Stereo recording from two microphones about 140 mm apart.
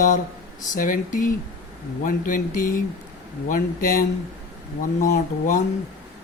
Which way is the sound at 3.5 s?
90° left.